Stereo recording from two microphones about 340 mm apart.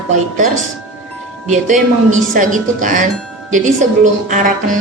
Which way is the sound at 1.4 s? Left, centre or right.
Right.